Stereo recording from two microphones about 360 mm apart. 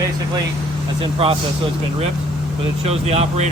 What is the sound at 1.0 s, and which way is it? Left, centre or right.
Speech, centre.